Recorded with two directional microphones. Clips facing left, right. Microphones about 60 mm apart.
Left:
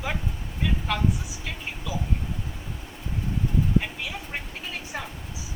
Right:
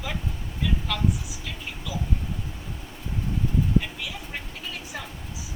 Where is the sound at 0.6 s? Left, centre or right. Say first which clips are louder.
Left 1 dB; left.